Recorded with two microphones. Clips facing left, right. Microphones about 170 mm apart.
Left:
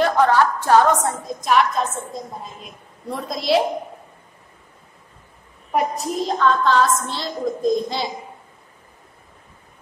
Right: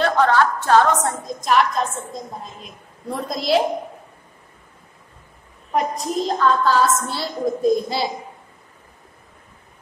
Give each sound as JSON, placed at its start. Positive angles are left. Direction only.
{"t": 0.0, "sound": "a woman's voice", "side_deg": 15}
{"t": 3.1, "sound": "a woman's voice", "side_deg": 0}
{"t": 5.7, "sound": "a woman's voice", "side_deg": 5}